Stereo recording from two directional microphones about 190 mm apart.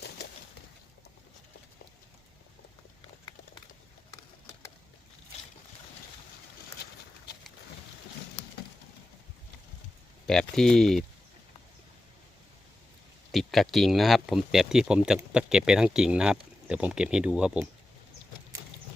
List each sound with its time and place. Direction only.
6.8 s horse: 55° left (ahead or behind)
10.2 s speech: 5° left (ahead or behind)
13.3 s speech: centre (ahead or behind)